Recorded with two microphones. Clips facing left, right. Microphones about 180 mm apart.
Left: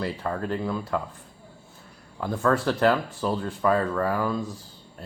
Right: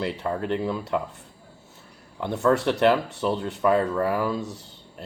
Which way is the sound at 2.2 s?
25° right (ahead or behind).